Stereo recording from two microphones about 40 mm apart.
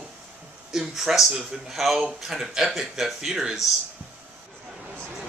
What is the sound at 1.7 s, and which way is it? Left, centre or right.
Speech, centre.